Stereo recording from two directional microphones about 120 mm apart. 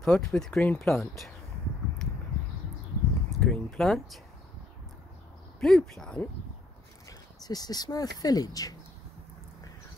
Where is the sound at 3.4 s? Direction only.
5° left (ahead or behind).